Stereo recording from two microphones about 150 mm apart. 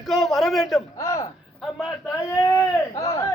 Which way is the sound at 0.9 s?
20° left (ahead or behind).